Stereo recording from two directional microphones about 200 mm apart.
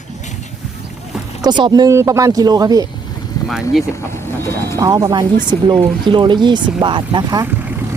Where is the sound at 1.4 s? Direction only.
20° right (ahead or behind).